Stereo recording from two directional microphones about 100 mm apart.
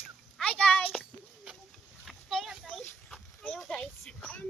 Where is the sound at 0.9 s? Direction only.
5° right (ahead or behind).